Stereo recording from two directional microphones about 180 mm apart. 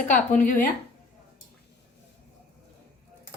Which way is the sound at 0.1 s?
45° left (ahead or behind).